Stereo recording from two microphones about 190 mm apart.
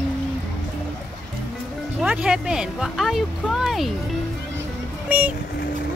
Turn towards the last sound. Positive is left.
turn(degrees=-10)  # may be behind; listen again after turning